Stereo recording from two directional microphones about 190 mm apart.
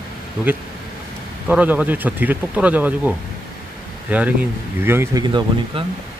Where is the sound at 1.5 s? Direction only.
5° right (ahead or behind).